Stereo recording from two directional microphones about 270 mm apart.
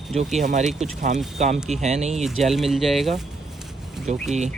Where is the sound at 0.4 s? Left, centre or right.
Right.